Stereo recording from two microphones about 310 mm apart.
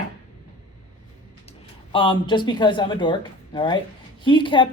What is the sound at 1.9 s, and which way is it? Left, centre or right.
Speech, centre.